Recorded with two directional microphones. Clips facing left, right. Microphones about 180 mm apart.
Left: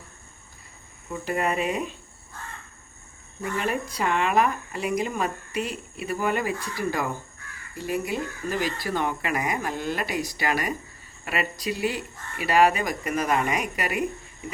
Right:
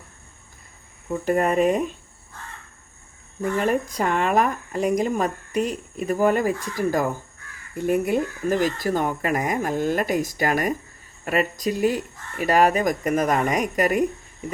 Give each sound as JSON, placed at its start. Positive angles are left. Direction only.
{"t": 1.2, "sound": "speech", "side_deg": -45}
{"t": 3.4, "sound": "speech", "side_deg": -45}